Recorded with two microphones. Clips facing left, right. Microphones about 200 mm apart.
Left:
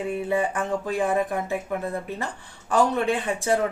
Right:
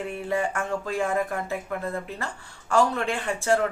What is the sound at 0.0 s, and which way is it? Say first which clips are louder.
Speech: left 3 dB; 15° left (ahead or behind).